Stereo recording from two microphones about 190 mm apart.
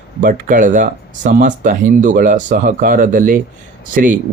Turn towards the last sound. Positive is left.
turn(degrees=-45)  # may be behind; listen again after turning